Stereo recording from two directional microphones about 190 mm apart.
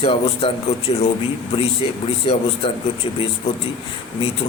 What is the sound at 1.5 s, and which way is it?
Speech, 30° left (ahead or behind).